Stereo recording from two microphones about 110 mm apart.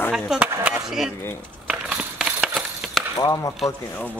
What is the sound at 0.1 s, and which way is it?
Speech, 10° right (ahead or behind).